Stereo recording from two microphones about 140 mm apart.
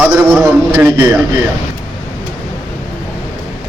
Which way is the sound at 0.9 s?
20° right (ahead or behind).